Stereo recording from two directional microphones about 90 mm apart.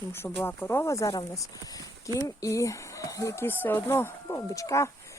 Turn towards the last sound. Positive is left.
turn(degrees=35)  # may be behind; listen again after turning